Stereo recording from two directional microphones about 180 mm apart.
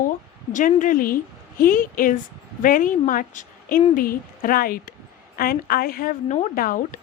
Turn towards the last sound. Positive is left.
turn(degrees=50)  # may be behind; listen again after turning